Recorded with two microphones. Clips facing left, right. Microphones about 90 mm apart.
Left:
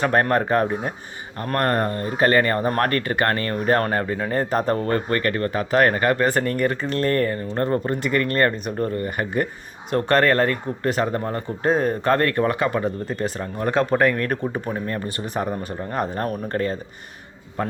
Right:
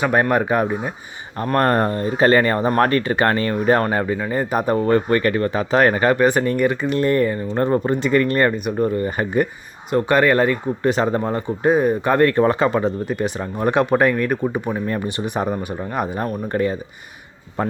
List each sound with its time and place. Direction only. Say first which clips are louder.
0.0 s speech: right 2 dB; 10° right (ahead or behind)
1.4 s speech: right 4 dB; 25° right (ahead or behind)
9.0 s speech: right 4 dB; 25° right (ahead or behind)
9.9 s speech: right 2 dB; 10° right (ahead or behind)
17.6 s speech: right 4 dB; 25° right (ahead or behind)